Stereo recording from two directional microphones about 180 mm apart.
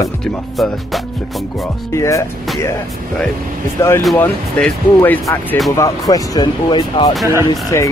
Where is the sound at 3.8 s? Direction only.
15° left (ahead or behind).